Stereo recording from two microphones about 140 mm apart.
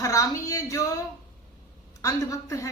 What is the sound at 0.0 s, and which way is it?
Speech, 25° left (ahead or behind).